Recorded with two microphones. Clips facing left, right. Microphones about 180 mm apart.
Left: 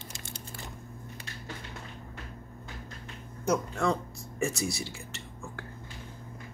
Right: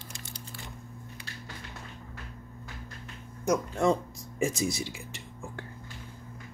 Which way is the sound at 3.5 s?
20° right (ahead or behind).